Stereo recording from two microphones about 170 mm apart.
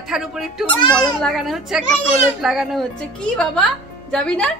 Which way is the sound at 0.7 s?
25° left (ahead or behind).